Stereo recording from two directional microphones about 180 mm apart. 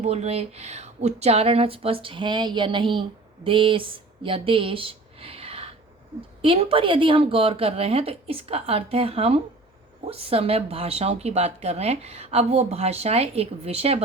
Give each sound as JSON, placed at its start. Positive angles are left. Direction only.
{"t": 0.0, "sound": "speech", "side_deg": -35}